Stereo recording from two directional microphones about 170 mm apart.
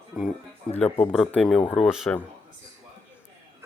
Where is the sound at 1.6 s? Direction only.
30° left (ahead or behind).